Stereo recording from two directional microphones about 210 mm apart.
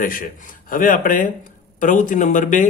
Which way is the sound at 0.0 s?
40° left (ahead or behind).